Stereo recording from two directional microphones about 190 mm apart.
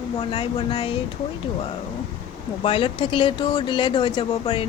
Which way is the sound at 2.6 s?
30° left (ahead or behind).